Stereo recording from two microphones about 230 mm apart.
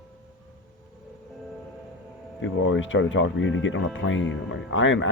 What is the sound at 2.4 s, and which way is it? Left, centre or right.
Speech, left.